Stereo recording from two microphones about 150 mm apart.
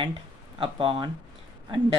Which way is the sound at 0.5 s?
35° right (ahead or behind).